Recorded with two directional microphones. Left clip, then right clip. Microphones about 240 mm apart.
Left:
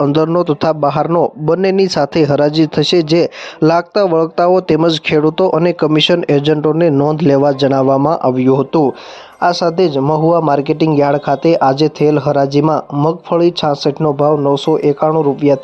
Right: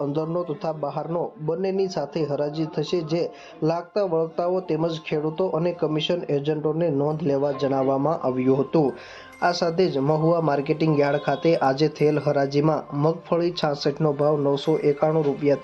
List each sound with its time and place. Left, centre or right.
0.0 s a man's voice: left